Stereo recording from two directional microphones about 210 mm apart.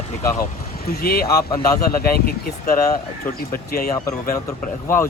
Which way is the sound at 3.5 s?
45° left (ahead or behind).